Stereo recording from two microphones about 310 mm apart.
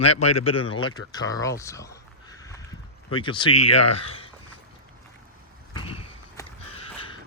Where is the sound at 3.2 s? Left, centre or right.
Centre.